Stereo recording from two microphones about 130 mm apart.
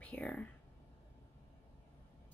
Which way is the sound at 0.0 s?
10° left (ahead or behind).